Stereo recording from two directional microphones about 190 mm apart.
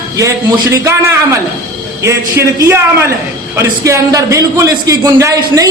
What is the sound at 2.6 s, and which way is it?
A man's voice, 15° right (ahead or behind).